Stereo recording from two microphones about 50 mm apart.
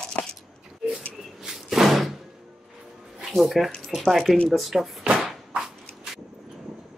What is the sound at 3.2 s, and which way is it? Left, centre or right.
Speech, centre.